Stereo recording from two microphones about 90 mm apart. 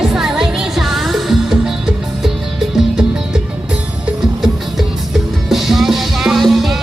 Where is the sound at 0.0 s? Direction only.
5° right (ahead or behind).